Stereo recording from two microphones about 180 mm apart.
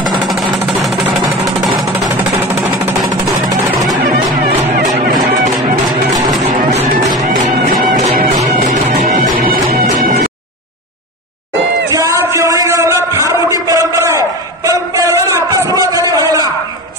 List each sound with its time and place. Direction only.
1.6 s music: centre (ahead or behind)
4.4 s music: 60° right (ahead or behind)
7.2 s music: 45° right (ahead or behind)
11.9 s a sound: 15° right (ahead or behind)